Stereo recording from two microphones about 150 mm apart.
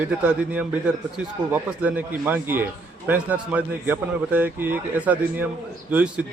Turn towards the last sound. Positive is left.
turn(degrees=-10)  # may be behind; listen again after turning